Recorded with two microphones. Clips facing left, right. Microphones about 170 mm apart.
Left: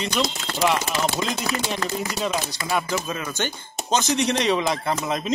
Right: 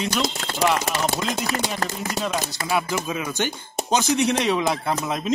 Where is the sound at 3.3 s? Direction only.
15° right (ahead or behind).